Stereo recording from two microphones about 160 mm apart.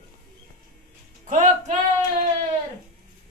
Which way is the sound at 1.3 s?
50° right (ahead or behind).